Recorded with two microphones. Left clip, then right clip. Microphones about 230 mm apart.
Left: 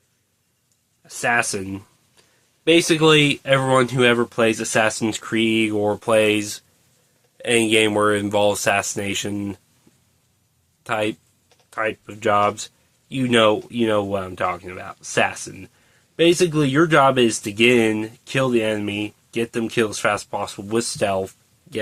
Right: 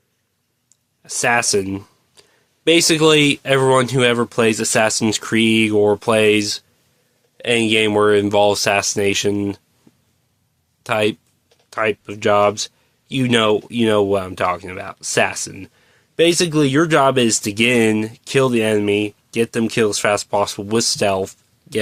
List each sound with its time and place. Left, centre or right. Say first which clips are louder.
1.0 s speech: right 3 dB; right
10.8 s speech: right 5 dB; right